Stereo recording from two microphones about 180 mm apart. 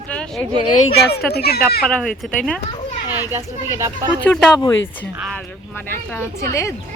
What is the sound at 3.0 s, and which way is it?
Speech, 10° right (ahead or behind).